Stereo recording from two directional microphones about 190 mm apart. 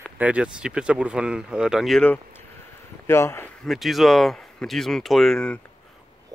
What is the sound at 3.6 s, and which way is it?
Speech, centre (ahead or behind).